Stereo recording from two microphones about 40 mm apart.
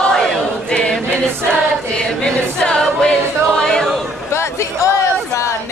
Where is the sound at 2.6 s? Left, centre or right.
Left.